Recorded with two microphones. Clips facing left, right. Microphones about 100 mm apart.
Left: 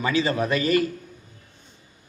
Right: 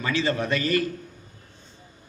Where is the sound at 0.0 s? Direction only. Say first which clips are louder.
Left 2 dB; 20° left (ahead or behind).